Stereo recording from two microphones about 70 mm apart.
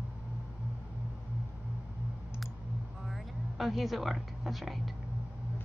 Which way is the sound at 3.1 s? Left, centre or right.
Centre.